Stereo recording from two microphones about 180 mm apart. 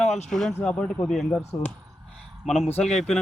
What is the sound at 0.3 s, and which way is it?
Speech, centre (ahead or behind).